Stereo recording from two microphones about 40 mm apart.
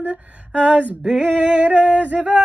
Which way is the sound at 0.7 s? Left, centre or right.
Right.